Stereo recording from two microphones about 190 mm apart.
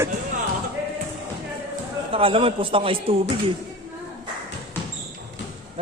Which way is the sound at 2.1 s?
30° right (ahead or behind).